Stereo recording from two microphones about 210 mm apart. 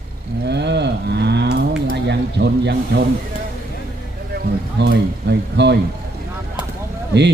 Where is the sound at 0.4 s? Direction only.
55° right (ahead or behind).